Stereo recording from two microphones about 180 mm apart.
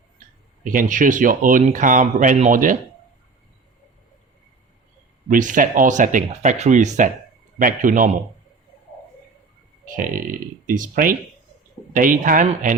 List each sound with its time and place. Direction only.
0.6 s speech: 50° right (ahead or behind)
5.3 s speech: 45° right (ahead or behind)
9.9 s speech: 50° right (ahead or behind)